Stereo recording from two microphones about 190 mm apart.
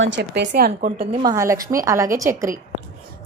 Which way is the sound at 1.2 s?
15° right (ahead or behind).